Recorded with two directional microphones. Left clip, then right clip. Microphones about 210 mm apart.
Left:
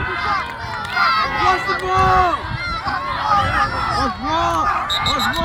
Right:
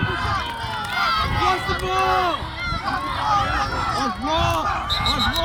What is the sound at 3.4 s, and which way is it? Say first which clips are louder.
Speech: left 5 dB; 15° left (ahead or behind).